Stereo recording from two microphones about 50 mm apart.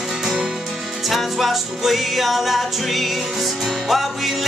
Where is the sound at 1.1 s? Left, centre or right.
Centre.